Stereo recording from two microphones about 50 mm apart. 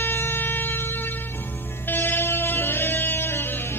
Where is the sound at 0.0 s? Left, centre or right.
Left.